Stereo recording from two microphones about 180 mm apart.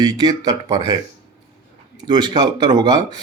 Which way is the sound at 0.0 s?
20° right (ahead or behind).